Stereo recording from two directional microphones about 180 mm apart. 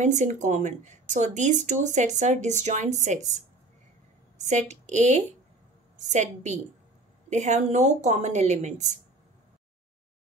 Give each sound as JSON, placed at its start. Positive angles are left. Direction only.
{"t": 0.0, "sound": "speech", "side_deg": -40}
{"t": 4.4, "sound": "a woman's voice", "side_deg": -40}